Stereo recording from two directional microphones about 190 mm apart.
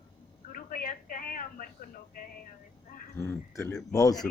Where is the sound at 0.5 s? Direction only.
45° left (ahead or behind).